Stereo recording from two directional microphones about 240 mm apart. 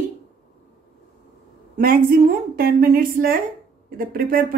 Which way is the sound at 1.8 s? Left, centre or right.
Right.